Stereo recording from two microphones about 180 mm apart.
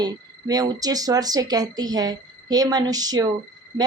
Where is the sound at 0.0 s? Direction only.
20° right (ahead or behind).